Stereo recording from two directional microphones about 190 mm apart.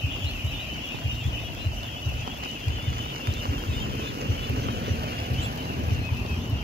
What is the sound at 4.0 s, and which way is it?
Vehicle, 60° right (ahead or behind).